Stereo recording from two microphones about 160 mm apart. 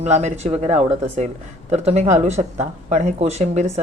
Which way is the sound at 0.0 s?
45° right (ahead or behind).